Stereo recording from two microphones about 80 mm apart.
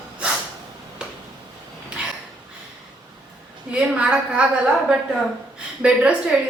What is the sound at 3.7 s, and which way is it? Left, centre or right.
A woman's voice, centre.